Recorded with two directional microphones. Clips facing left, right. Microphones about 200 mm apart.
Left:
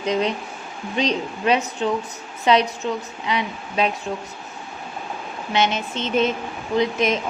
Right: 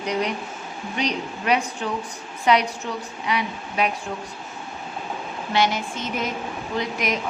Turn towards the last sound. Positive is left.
turn(degrees=20)  # may be behind; listen again after turning